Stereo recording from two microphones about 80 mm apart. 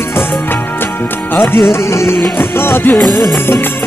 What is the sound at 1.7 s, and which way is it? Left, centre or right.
Music, left.